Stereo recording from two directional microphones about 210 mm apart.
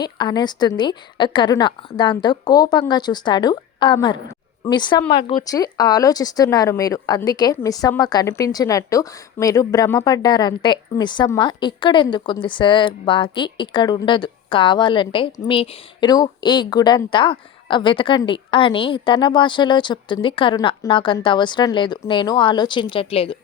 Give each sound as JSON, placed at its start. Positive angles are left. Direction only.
{"t": 0.0, "sound": "speech", "side_deg": 20}